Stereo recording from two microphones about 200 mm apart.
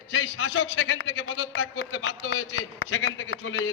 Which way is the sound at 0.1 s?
85° left.